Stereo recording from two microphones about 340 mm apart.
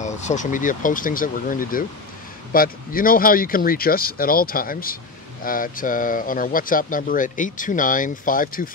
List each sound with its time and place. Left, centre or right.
0.0 s speech: left